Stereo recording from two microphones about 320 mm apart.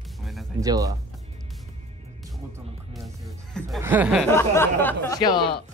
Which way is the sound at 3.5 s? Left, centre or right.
Centre.